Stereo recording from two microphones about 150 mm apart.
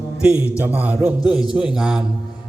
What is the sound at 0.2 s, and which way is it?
A man's voice, 10° right (ahead or behind).